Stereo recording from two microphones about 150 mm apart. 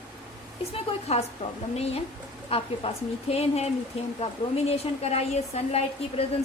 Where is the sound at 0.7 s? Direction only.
45° left (ahead or behind).